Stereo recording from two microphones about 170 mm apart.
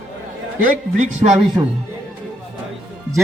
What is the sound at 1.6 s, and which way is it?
Speech, 15° right (ahead or behind).